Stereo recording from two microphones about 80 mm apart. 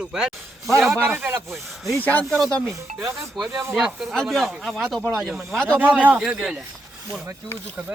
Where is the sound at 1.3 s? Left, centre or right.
Right.